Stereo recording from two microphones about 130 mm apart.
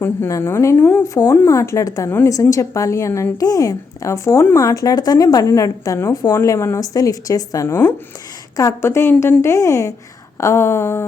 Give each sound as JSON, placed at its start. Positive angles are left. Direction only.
{"t": 0.0, "sound": "a woman's voice", "side_deg": 20}